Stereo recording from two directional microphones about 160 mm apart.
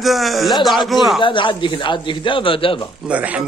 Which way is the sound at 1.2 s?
30° left (ahead or behind).